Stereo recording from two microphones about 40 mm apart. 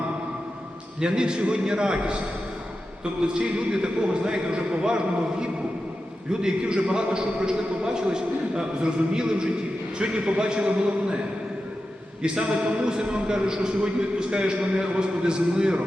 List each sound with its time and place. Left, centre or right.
0.9 s a man's voice: centre
12.2 s a man's voice: right